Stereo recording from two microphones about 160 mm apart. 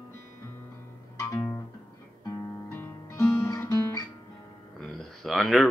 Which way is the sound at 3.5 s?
15° left (ahead or behind).